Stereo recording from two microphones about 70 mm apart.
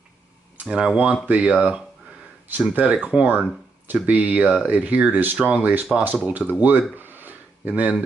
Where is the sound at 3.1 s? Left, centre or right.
Right.